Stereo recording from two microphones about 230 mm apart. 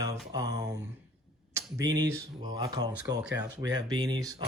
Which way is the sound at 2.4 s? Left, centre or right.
Centre.